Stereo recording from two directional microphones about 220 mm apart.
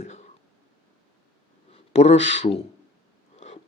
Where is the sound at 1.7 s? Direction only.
30° left (ahead or behind).